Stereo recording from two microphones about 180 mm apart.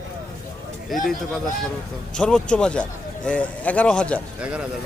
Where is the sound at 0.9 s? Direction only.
Centre (ahead or behind).